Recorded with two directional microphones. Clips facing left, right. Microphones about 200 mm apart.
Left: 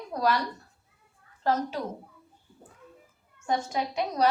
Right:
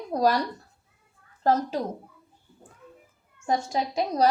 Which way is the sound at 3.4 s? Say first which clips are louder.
Right 2 dB; 35° right (ahead or behind).